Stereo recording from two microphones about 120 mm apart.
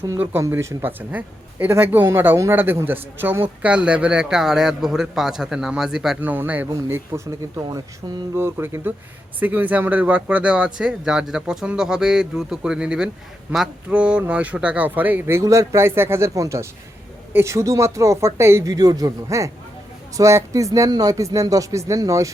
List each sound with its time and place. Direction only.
0.2 s a man's voice: 20° right (ahead or behind)
6.1 s a man's voice: 15° right (ahead or behind)
8.4 s a man's voice: 20° right (ahead or behind)